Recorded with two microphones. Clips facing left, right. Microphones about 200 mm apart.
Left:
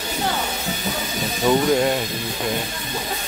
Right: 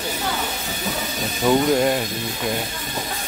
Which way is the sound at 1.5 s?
Centre (ahead or behind).